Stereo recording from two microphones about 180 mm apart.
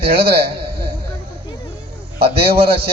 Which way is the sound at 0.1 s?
60° right (ahead or behind).